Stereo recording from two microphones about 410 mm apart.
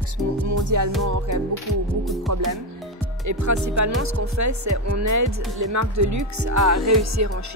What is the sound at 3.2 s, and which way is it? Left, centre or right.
Speech, right.